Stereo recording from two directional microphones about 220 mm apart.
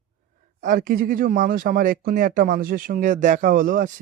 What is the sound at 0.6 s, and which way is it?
Speech, 35° right (ahead or behind).